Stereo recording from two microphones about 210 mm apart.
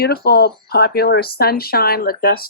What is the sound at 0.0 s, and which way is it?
Speech, 50° left (ahead or behind).